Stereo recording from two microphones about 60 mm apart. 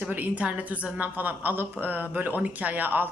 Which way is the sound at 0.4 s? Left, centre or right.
Centre.